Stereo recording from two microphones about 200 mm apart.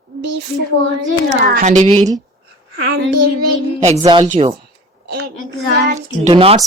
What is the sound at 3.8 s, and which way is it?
Speech, 35° right (ahead or behind).